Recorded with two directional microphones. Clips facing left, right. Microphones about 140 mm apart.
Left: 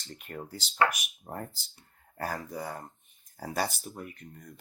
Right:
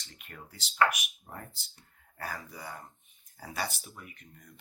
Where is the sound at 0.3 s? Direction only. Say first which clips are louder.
Left 1 dB; 40° left (ahead or behind).